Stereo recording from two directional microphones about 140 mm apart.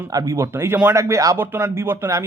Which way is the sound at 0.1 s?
25° right (ahead or behind).